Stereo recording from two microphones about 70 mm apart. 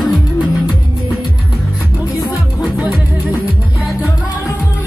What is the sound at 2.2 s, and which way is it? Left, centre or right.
Music, centre.